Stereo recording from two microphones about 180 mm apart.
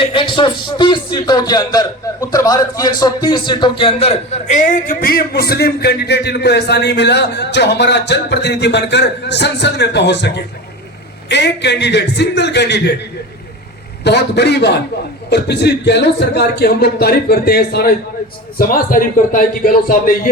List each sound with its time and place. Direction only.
0.0 s a man's voice: 30° left (ahead or behind); by 12.9 s 70° left (ahead or behind)
14.0 s a man's voice: 70° left (ahead or behind); by 20.3 s 50° left (ahead or behind)